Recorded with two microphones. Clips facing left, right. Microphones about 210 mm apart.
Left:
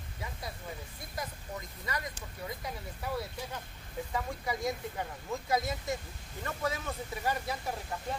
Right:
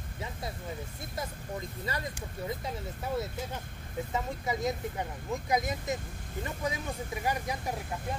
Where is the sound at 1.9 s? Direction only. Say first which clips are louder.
Even; 30° right (ahead or behind).